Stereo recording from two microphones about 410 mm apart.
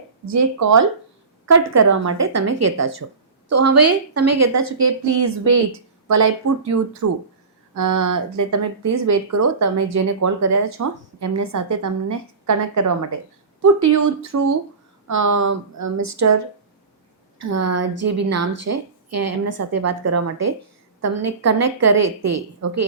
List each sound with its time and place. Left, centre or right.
0.3 s speech: right
17.4 s speech: right